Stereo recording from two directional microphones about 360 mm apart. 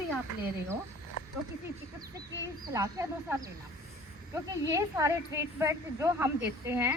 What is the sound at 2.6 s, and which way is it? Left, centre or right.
Speech, centre.